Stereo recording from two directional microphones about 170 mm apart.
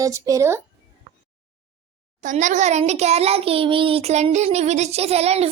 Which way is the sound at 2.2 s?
45° right (ahead or behind).